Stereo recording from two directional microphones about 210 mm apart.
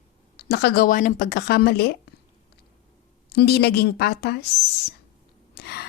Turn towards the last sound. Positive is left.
turn(degrees=50)  # may be behind; listen again after turning